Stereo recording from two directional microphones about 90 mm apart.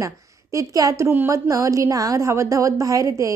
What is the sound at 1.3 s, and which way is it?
A woman's voice, 40° right (ahead or behind).